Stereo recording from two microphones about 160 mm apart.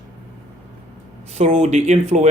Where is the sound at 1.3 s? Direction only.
45° right (ahead or behind).